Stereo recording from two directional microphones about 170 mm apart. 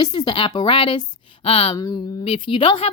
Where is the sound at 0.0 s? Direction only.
25° left (ahead or behind).